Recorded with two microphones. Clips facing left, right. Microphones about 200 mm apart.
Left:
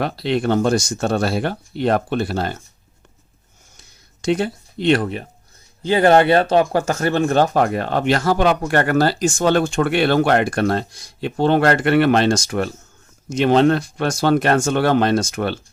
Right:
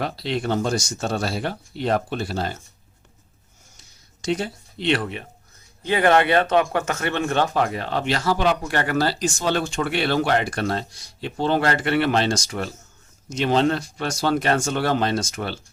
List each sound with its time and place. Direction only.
0.0 s speech: 60° left (ahead or behind)
3.8 s a sound: 55° left (ahead or behind); by 5.2 s 40° left (ahead or behind)
5.8 s speech: 30° left (ahead or behind); by 15.5 s 55° left (ahead or behind)